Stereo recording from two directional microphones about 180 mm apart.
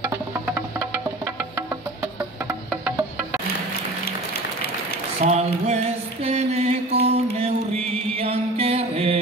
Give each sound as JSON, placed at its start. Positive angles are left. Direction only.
{"t": 0.6, "sound": "music", "side_deg": -15}
{"t": 5.2, "sound": "a sound", "side_deg": -35}
{"t": 7.3, "sound": "music", "side_deg": -35}